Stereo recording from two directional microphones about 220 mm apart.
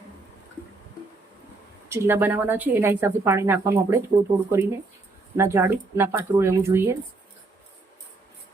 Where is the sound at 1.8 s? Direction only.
10° right (ahead or behind).